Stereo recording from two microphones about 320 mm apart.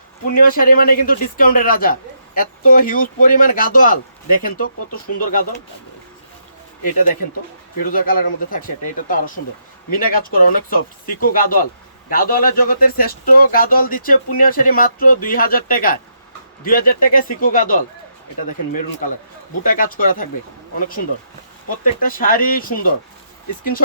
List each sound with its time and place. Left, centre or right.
0.3 s speech: left
6.8 s speech: left
19.6 s speech: left